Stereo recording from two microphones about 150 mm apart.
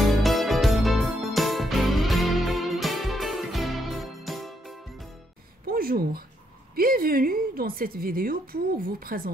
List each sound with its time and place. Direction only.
0.0 s music: centre (ahead or behind)
5.7 s a sound: 80° right
6.7 s a woman's voice: 75° right (ahead or behind)